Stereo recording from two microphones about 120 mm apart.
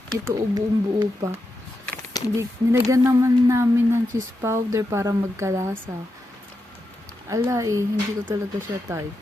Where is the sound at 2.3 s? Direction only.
25° right (ahead or behind).